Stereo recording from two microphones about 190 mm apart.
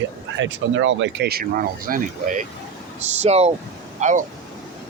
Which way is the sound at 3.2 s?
35° right (ahead or behind).